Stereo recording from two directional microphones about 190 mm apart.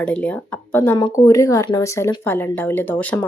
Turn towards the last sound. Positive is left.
turn(degrees=10)  # may be behind; listen again after turning